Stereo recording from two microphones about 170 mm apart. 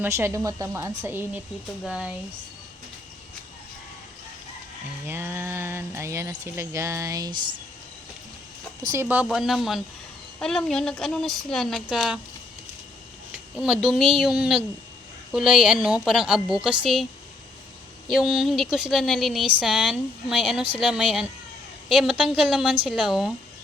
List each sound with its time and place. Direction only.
0.0 s speech: 15° right (ahead or behind)
1.8 s speech: centre (ahead or behind)
5.0 s speech: 15° right (ahead or behind)
8.9 s speech: 10° right (ahead or behind)
9.2 s speech: centre (ahead or behind)
13.3 s speech: 5° right (ahead or behind)
18.1 s speech: 5° right (ahead or behind)